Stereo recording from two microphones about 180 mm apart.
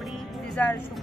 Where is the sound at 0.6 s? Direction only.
10° left (ahead or behind).